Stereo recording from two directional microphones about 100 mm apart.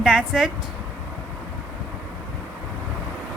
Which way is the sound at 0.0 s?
10° right (ahead or behind).